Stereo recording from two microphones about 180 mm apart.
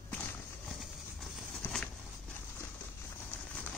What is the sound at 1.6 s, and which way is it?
Patter, 5° left (ahead or behind).